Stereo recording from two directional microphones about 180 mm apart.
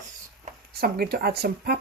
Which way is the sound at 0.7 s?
60° right (ahead or behind).